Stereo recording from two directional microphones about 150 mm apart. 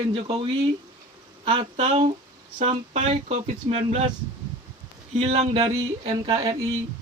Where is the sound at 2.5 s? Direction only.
50° right (ahead or behind).